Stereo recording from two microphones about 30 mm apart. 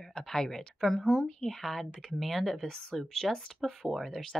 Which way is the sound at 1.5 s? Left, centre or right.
Centre.